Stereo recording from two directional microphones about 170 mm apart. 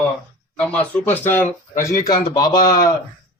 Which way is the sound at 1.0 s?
10° left (ahead or behind).